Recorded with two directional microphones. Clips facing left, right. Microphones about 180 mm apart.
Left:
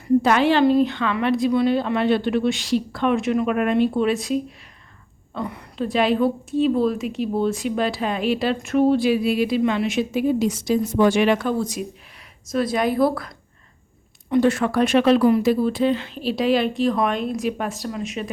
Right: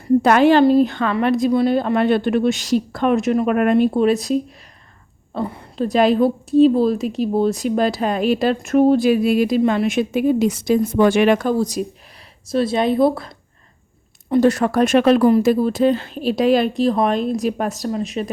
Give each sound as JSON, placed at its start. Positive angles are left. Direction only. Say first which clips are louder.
{"t": 0.2, "sound": "a woman's voice", "louder": "right 7 dB", "side_deg": -50}
{"t": 14.3, "sound": "speech", "louder": "right 3 dB", "side_deg": -35}